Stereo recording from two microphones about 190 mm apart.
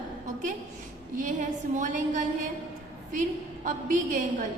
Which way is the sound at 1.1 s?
45° right (ahead or behind).